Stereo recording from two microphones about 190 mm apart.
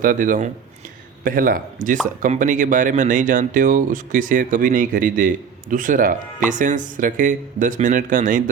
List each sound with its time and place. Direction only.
0.0 s speech: 45° right (ahead or behind)